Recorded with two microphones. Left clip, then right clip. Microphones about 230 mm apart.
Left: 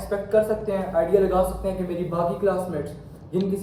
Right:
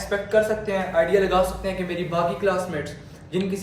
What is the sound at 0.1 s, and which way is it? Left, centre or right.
A man's voice, right.